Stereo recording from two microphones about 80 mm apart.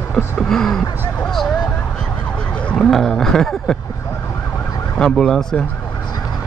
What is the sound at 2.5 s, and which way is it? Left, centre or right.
Vehicle, centre.